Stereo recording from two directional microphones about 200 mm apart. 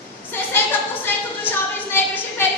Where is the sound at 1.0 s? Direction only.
10° left (ahead or behind).